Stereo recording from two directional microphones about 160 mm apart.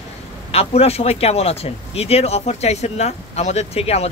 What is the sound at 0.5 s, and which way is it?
Speech, 40° left (ahead or behind).